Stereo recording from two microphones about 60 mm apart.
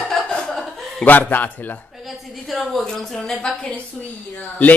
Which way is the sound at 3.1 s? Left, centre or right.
Centre.